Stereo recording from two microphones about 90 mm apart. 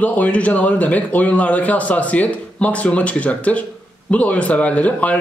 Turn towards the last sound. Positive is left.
turn(degrees=15)  # may be behind; listen again after turning